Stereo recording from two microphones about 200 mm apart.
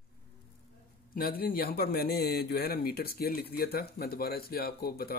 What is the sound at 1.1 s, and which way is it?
Speech, 45° left (ahead or behind).